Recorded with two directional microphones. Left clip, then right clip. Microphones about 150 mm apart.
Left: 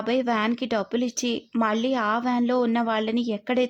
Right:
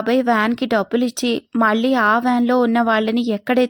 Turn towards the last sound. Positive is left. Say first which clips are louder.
# right 7 dB
turn(degrees=-30)  # may be behind; listen again after turning